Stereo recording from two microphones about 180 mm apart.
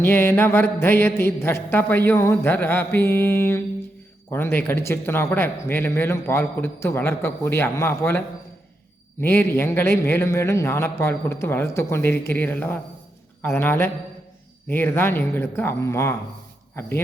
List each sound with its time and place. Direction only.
0.0 s speech: 10° left (ahead or behind)
9.2 s speech: 15° left (ahead or behind)